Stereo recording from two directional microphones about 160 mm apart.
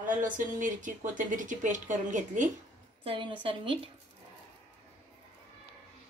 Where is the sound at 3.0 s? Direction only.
35° right (ahead or behind).